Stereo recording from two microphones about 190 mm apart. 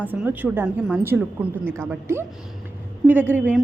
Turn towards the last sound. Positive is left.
turn(degrees=-10)  # may be behind; listen again after turning